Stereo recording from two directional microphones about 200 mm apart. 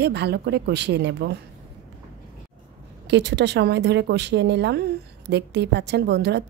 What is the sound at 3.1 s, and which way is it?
A woman's voice, 60° right (ahead or behind).